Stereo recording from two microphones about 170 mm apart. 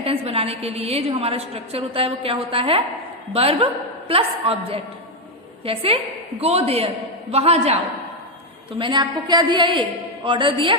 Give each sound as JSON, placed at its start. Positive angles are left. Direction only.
{"t": 0.0, "sound": "a woman's voice", "side_deg": -35}
{"t": 8.8, "sound": "a woman's voice", "side_deg": -25}